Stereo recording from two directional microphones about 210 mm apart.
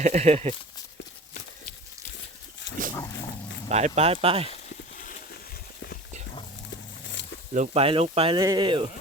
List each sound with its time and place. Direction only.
0.0 s speech: 35° right (ahead or behind)
3.7 s speech: 30° right (ahead or behind)
4.9 s a sound: 40° left (ahead or behind)
7.5 s speech: 35° right (ahead or behind)